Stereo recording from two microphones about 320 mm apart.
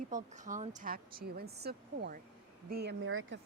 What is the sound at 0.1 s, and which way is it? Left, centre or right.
Speech, right.